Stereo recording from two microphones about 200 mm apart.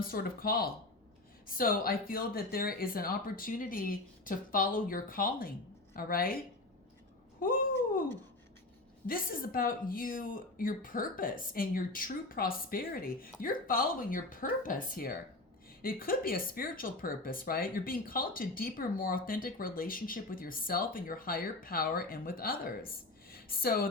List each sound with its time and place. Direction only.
0.0 s speech: 45° left (ahead or behind)
7.3 s cat: 45° left (ahead or behind)
9.0 s speech: 45° left (ahead or behind)